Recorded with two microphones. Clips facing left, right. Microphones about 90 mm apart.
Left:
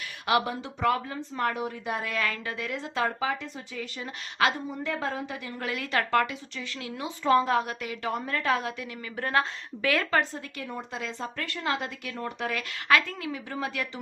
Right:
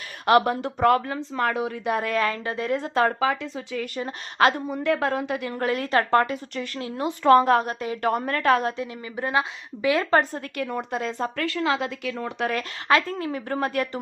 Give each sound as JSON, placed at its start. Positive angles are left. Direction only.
{"t": 0.3, "sound": "speech", "side_deg": -55}
{"t": 2.0, "sound": "a woman's voice", "side_deg": -40}
{"t": 3.2, "sound": "speech", "side_deg": -90}
{"t": 3.9, "sound": "a woman's voice", "side_deg": -45}
{"t": 4.7, "sound": "a woman's voice", "side_deg": -70}
{"t": 5.5, "sound": "a woman's voice", "side_deg": -40}
{"t": 6.7, "sound": "a woman's voice", "side_deg": -35}
{"t": 7.3, "sound": "a woman's voice", "side_deg": -60}
{"t": 8.0, "sound": "a woman's voice", "side_deg": -55}
{"t": 8.8, "sound": "a woman's voice", "side_deg": -15}
{"t": 10.1, "sound": "a woman's voice", "side_deg": -45}
{"t": 10.6, "sound": "a woman's voice", "side_deg": -70}
{"t": 10.9, "sound": "a woman's voice", "side_deg": -50}
{"t": 12.5, "sound": "a woman's voice", "side_deg": -35}